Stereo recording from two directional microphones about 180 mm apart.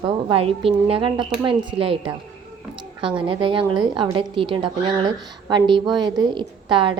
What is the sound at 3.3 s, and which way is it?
A woman's voice, 30° right (ahead or behind).